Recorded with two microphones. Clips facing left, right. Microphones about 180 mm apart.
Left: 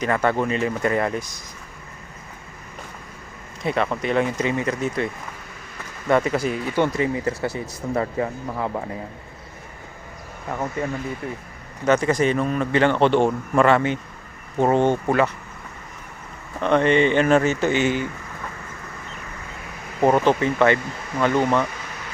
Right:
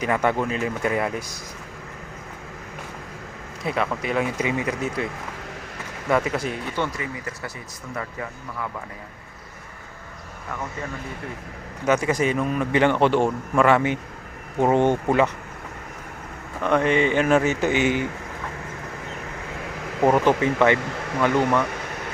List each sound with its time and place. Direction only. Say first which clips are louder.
0.0 s a man's voice: left 1 dB; 10° right (ahead or behind)
0.4 s speech: left 2 dB; centre (ahead or behind)
3.6 s speech: left 2 dB; 5° right (ahead or behind)
6.1 s speech: left 3 dB; 5° right (ahead or behind)
6.7 s speech: left 7 dB; 20° left (ahead or behind)
7.0 s speech: left 9 dB; 30° left (ahead or behind)
10.5 s speech: left 6 dB; 25° left (ahead or behind)
11.9 s a man's voice: left 2 dB; 10° right (ahead or behind)
16.7 s a man's voice: left 2 dB; 5° right (ahead or behind)
20.1 s a man's voice: left 1 dB; 15° right (ahead or behind)
20.8 s speech: right 3 dB; 75° right (ahead or behind)
21.2 s a man's voice: left 1 dB; 10° right (ahead or behind)
21.7 s air conditioning: right 4 dB; 60° right (ahead or behind)